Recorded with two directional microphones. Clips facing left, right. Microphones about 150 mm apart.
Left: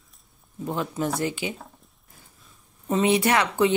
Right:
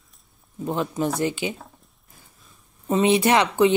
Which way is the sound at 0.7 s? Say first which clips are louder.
Right 3 dB; 20° right (ahead or behind).